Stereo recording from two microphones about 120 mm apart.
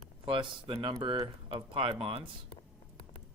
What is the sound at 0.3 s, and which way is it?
Speech, 45° right (ahead or behind).